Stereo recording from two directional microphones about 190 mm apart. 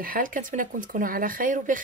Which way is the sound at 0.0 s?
45° right (ahead or behind).